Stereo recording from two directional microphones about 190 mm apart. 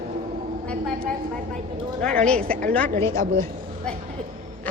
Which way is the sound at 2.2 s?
5° left (ahead or behind).